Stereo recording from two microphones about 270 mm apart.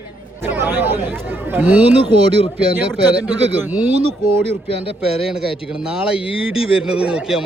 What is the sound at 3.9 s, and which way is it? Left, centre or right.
Speech, right.